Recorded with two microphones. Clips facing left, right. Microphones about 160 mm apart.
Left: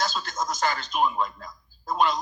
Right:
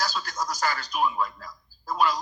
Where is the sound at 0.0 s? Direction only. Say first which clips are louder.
Left 1 dB; 25° left (ahead or behind).